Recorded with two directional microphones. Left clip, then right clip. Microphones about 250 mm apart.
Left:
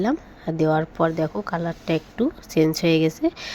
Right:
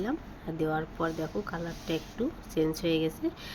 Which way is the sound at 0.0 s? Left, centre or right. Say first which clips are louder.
Left 10 dB; left.